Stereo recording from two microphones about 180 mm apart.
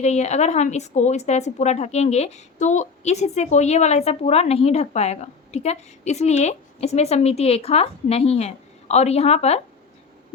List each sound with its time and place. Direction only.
0.0 s speech: 40° left (ahead or behind)